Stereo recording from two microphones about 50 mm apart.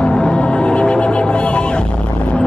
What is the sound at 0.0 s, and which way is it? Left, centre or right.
Music, centre.